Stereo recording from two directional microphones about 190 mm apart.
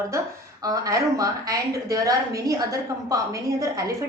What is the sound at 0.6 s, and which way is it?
A woman's voice, 20° right (ahead or behind).